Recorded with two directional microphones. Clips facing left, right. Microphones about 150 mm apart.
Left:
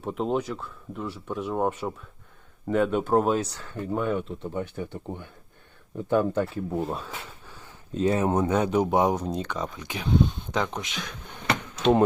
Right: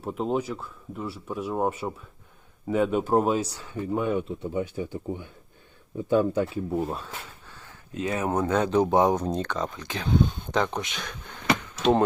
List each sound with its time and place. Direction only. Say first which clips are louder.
0.0 s speech: even; centre (ahead or behind)
6.3 s speech: right 1 dB; 10° right (ahead or behind)
6.7 s speech: even; centre (ahead or behind)
7.9 s speech: left 3 dB; 30° left (ahead or behind); by 10.1 s 10° left (ahead or behind)
10.1 s speech: even; centre (ahead or behind)
11.4 s a sound: even; 5° right (ahead or behind)